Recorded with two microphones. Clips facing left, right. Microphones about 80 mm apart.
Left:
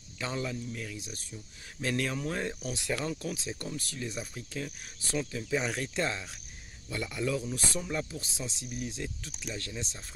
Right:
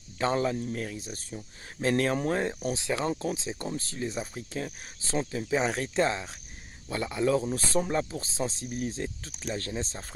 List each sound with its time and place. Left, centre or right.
0.2 s speech: right
0.9 s speech: right
2.4 s speech: right